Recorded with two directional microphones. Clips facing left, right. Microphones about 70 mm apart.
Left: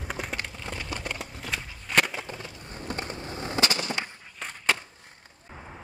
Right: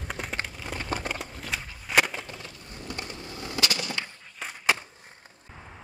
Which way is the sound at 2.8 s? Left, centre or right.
Left.